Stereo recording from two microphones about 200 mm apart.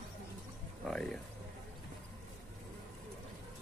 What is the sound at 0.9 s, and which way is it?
Speech, 5° left (ahead or behind).